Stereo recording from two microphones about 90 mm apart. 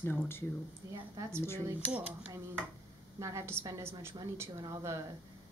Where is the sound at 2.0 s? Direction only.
15° right (ahead or behind).